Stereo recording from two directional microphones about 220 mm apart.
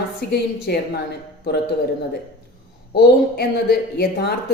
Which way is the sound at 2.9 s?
45° left (ahead or behind).